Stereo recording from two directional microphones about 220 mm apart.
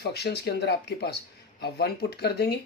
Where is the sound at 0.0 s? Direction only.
50° left (ahead or behind).